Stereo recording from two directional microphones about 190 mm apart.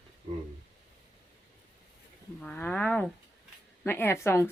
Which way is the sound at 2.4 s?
10° left (ahead or behind).